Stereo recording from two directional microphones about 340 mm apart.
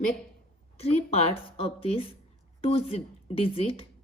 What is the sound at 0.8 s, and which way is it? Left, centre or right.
A woman's voice, centre.